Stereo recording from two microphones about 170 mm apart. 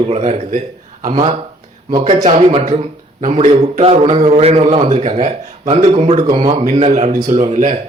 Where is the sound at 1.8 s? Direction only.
25° right (ahead or behind).